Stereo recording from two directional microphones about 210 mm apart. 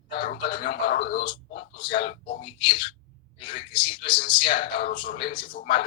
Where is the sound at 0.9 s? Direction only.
50° left (ahead or behind).